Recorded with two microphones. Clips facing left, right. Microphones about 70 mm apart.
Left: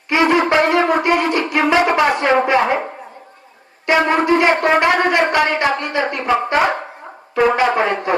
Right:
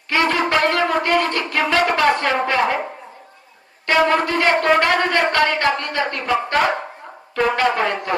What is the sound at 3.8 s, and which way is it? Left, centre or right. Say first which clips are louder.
Shofar: left 2 dB; left.